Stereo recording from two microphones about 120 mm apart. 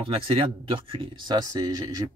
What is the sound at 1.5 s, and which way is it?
Speech, 30° right (ahead or behind).